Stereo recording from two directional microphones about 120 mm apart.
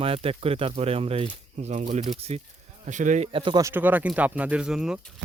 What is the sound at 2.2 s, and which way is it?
Speech, 60° right (ahead or behind).